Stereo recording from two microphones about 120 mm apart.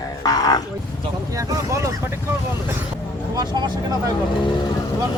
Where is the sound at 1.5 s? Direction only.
25° right (ahead or behind).